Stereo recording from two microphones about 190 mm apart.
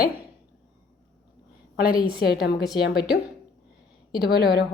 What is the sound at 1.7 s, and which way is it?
A woman's voice, 50° left (ahead or behind).